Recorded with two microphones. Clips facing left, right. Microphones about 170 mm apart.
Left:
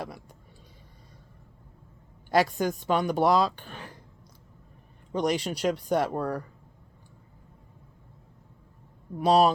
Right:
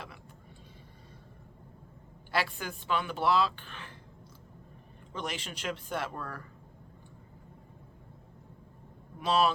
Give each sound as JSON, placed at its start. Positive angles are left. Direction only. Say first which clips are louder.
{"t": 2.3, "sound": "speech", "louder": "left 9 dB", "side_deg": 40}
{"t": 5.1, "sound": "speech", "louder": "left 11 dB", "side_deg": 40}
{"t": 9.1, "sound": "speech", "louder": "left 7 dB", "side_deg": 40}